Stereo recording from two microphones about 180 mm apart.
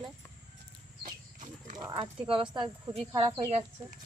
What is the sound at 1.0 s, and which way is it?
Livestock, 45° right (ahead or behind).